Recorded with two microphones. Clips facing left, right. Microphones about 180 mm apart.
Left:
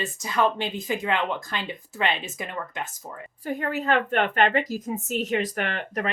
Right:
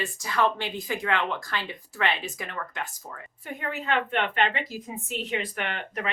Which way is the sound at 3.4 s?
40° left (ahead or behind).